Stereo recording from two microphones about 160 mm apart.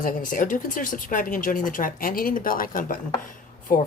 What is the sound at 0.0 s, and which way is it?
Speech, 55° left (ahead or behind).